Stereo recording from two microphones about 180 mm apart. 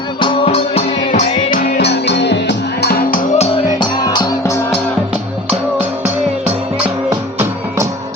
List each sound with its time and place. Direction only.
0.2 s music: 35° left (ahead or behind); by 3.2 s 60° left (ahead or behind)
3.3 s music: 35° left (ahead or behind)
4.0 s music: 20° left (ahead or behind)